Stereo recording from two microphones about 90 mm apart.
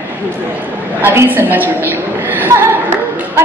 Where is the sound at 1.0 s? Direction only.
25° right (ahead or behind).